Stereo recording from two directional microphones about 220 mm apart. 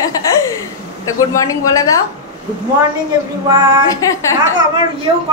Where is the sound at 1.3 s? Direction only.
15° left (ahead or behind).